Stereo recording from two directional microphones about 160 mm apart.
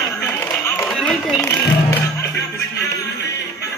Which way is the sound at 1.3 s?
20° left (ahead or behind).